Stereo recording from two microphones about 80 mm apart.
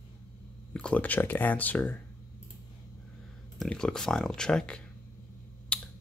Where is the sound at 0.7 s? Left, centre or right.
Centre.